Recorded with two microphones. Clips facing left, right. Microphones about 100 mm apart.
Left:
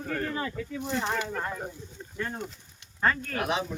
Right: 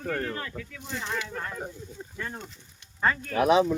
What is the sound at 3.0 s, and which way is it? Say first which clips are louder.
Speech: even; 5° right (ahead or behind).